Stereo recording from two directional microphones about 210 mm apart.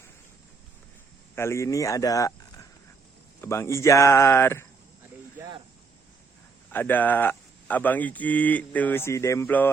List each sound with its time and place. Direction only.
1.4 s speech: 15° left (ahead or behind)
6.7 s speech: 10° left (ahead or behind)